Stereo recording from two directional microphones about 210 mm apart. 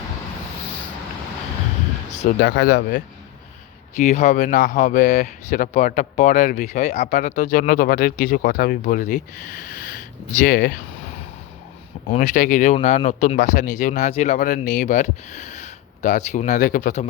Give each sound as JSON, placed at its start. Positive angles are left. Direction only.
{"t": 2.4, "sound": "speech", "side_deg": 55}
{"t": 3.9, "sound": "speech", "side_deg": 35}
{"t": 12.0, "sound": "speech", "side_deg": 35}